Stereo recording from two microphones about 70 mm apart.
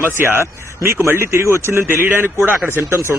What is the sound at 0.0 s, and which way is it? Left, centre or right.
Speech, right.